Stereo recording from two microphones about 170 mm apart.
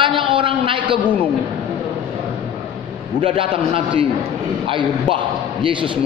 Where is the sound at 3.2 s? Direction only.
30° right (ahead or behind).